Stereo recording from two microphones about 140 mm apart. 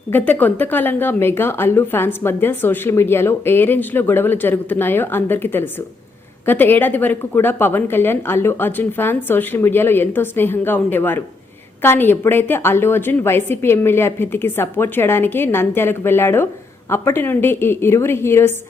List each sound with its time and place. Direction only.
0.1 s speech: 15° left (ahead or behind)